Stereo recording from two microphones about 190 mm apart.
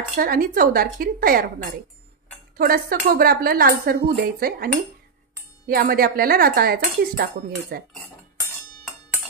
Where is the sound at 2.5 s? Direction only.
50° right (ahead or behind).